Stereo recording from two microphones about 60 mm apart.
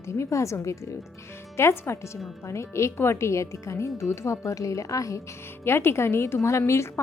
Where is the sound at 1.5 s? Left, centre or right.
Left.